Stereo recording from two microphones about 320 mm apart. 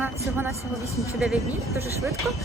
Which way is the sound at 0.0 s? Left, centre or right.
Centre.